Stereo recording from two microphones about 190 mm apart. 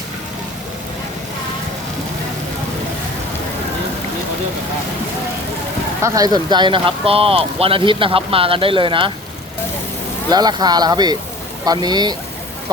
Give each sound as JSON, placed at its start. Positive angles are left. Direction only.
{"t": 6.0, "sound": "speech", "side_deg": -20}
{"t": 10.2, "sound": "speech", "side_deg": -20}